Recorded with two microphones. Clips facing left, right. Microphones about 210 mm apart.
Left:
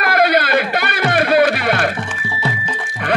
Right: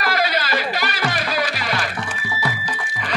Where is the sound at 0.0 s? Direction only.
55° left (ahead or behind).